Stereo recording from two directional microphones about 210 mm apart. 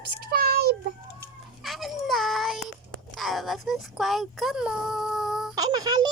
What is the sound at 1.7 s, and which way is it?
A child's voice, centre (ahead or behind).